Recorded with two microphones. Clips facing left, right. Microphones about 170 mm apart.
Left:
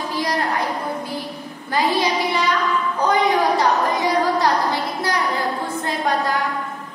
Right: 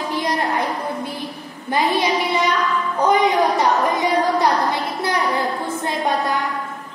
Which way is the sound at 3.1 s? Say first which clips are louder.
Right 2 dB; 20° right (ahead or behind).